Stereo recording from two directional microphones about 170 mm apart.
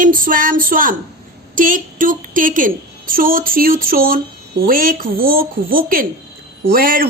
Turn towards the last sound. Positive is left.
turn(degrees=-60)  # may be behind; listen again after turning